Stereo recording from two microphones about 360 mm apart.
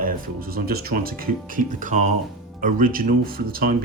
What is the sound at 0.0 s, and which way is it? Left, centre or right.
Speech, right.